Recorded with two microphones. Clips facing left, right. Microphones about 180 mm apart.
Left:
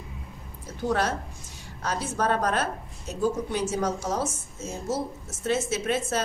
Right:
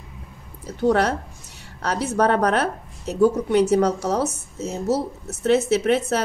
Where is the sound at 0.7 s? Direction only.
65° right (ahead or behind).